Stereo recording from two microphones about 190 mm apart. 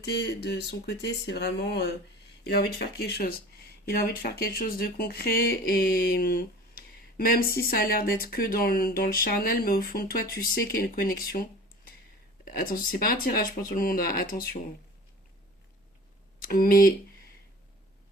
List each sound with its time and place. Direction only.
0.0 s speech: 60° left (ahead or behind)
12.5 s speech: 45° left (ahead or behind)
16.4 s speech: 50° left (ahead or behind)